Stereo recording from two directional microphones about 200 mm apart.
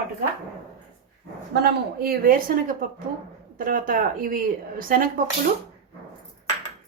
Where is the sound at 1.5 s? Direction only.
55° right (ahead or behind).